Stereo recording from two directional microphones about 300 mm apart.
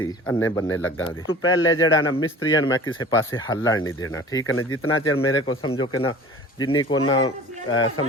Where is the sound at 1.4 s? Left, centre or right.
Left.